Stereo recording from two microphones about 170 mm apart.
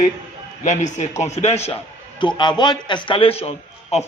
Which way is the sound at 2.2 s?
25° left (ahead or behind).